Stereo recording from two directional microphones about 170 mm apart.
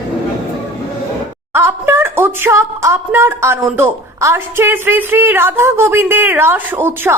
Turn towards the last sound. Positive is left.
turn(degrees=-15)  # may be behind; listen again after turning